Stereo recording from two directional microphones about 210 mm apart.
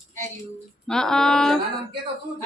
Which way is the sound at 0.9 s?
5° left (ahead or behind).